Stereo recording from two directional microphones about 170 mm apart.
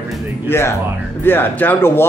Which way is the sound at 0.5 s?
10° left (ahead or behind).